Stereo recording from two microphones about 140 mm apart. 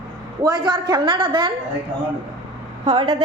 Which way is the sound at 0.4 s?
30° right (ahead or behind).